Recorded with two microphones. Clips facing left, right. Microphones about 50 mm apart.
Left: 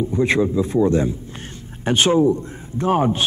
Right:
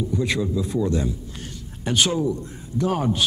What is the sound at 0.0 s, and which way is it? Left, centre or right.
A man's voice, left.